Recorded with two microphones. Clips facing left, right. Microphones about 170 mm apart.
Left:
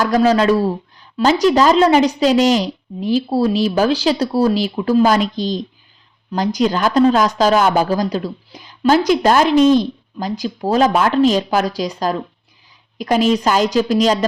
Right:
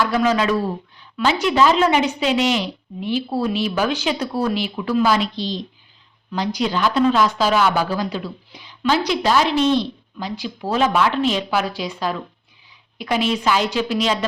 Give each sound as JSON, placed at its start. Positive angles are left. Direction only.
{"t": 0.0, "sound": "speech", "side_deg": 35}